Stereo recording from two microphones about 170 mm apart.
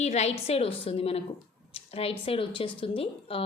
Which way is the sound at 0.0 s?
40° left (ahead or behind).